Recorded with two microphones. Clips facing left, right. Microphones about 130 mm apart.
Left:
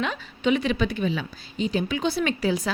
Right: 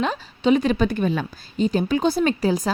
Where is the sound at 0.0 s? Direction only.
35° right (ahead or behind).